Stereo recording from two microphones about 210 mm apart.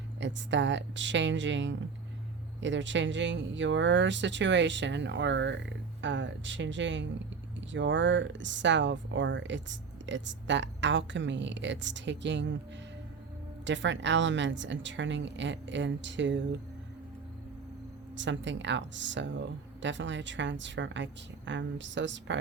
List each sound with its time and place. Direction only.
0.2 s speech: 60° right (ahead or behind)
13.7 s speech: 60° right (ahead or behind)
18.2 s speech: 60° right (ahead or behind)